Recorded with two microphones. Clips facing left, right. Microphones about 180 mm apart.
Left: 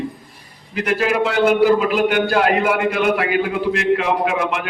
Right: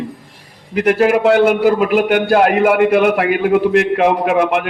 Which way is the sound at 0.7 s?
55° right (ahead or behind).